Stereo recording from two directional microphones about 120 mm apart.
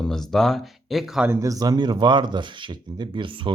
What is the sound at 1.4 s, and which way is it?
Speech, 30° right (ahead or behind).